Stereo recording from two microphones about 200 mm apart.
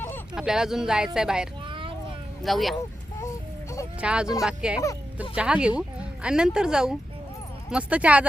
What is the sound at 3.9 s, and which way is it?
Speech, 5° right (ahead or behind).